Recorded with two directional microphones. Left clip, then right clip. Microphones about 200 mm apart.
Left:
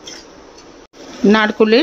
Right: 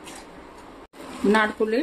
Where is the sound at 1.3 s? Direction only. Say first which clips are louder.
Left 9 dB; 40° left (ahead or behind).